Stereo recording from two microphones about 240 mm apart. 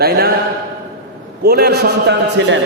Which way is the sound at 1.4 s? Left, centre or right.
Right.